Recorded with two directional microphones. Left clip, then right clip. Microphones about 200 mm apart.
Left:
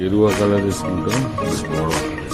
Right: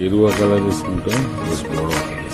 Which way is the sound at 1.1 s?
Centre (ahead or behind).